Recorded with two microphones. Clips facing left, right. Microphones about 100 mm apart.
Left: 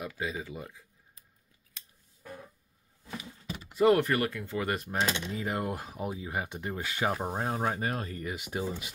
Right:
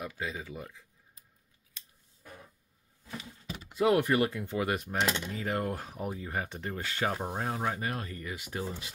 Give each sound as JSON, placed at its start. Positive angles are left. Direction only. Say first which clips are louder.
{"t": 0.2, "sound": "speech", "louder": "left 2 dB", "side_deg": 5}
{"t": 3.7, "sound": "speech", "louder": "left 2 dB", "side_deg": -10}
{"t": 4.6, "sound": "speech", "louder": "left 1 dB", "side_deg": 0}
{"t": 7.5, "sound": "speech", "louder": "left 2 dB", "side_deg": 30}